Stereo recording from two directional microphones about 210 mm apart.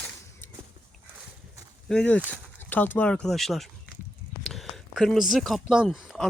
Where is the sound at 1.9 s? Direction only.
5° left (ahead or behind).